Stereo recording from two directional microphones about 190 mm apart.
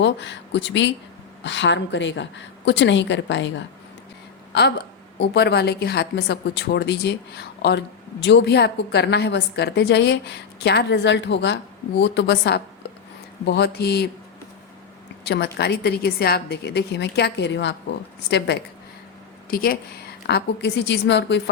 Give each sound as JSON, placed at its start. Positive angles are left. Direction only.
{"t": 0.0, "sound": "a woman's voice", "side_deg": 70}
{"t": 5.2, "sound": "a woman's voice", "side_deg": 60}
{"t": 15.2, "sound": "a woman's voice", "side_deg": 60}
{"t": 19.5, "sound": "a woman's voice", "side_deg": 50}